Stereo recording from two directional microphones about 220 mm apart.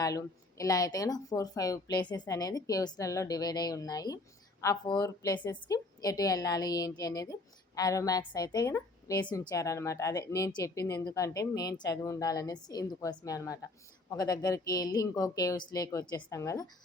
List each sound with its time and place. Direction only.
0.0 s speech: 15° left (ahead or behind)